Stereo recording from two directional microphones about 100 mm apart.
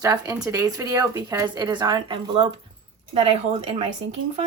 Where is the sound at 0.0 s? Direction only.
35° right (ahead or behind).